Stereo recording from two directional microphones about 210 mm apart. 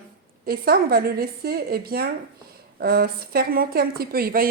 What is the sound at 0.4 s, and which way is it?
A woman's voice, 45° right (ahead or behind).